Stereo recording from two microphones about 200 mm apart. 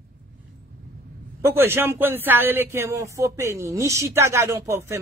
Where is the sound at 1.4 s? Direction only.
10° right (ahead or behind).